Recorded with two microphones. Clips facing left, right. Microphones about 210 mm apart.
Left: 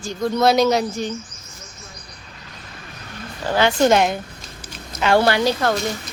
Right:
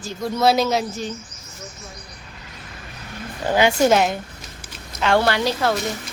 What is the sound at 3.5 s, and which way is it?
Speech, 10° right (ahead or behind).